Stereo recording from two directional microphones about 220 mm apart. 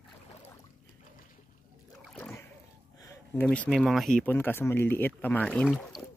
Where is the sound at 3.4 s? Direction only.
5° left (ahead or behind).